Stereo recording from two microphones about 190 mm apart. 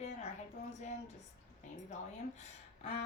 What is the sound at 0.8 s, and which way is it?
Speech, 35° left (ahead or behind).